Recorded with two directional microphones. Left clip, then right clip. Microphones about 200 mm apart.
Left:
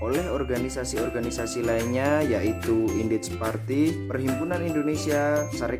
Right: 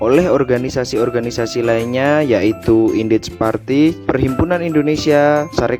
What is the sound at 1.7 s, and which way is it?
Speech, 40° right (ahead or behind).